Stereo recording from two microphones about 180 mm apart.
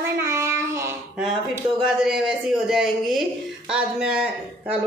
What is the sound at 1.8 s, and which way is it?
A woman's voice, centre (ahead or behind).